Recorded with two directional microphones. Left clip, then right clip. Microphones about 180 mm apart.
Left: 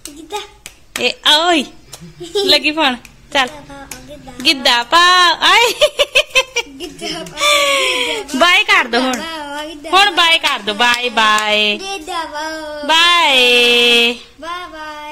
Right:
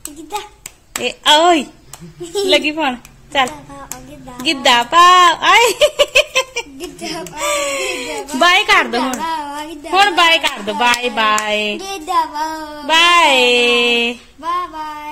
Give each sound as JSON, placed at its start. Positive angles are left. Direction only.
{"t": 1.0, "sound": "a woman's voice", "side_deg": 5}
{"t": 6.8, "sound": "a child's voice", "side_deg": -75}
{"t": 7.3, "sound": "a woman's voice", "side_deg": 10}
{"t": 9.2, "sound": "a sound", "side_deg": -70}
{"t": 9.9, "sound": "a woman's voice", "side_deg": 5}
{"t": 11.1, "sound": "music", "side_deg": 5}
{"t": 11.8, "sound": "child singing", "side_deg": -75}
{"t": 12.8, "sound": "music", "side_deg": 5}
{"t": 14.4, "sound": "child singing", "side_deg": -75}